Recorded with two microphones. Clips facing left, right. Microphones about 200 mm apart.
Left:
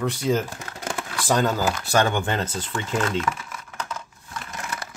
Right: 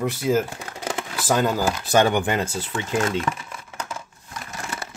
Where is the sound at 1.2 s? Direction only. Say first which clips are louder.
Right 1 dB; 5° right (ahead or behind).